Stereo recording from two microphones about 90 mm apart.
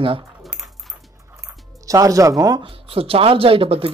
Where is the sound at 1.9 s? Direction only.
40° right (ahead or behind).